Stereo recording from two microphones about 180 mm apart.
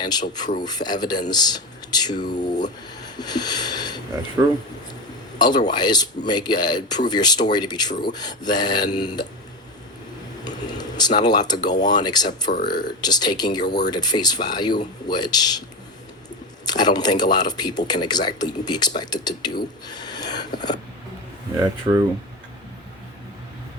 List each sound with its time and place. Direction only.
0.0 s speech: 25° left (ahead or behind)
4.4 s a man's voice: 15° right (ahead or behind)
5.4 s speech: 25° left (ahead or behind)
10.4 s speech: 20° left (ahead or behind)
16.6 s speech: 20° left (ahead or behind)
21.9 s speech: 20° right (ahead or behind)